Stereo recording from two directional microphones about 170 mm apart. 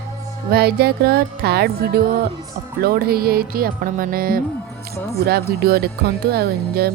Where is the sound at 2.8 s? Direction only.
65° right (ahead or behind).